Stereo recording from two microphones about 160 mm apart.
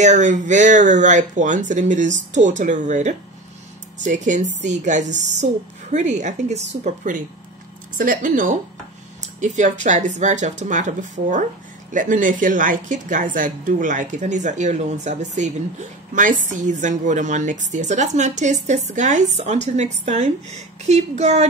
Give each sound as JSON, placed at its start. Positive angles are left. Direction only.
{"t": 0.0, "sound": "a woman's voice", "side_deg": -50}